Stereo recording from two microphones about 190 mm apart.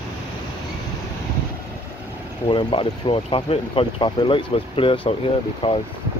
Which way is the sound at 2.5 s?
25° left (ahead or behind).